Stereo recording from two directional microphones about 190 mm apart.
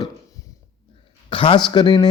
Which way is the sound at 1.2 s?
25° left (ahead or behind).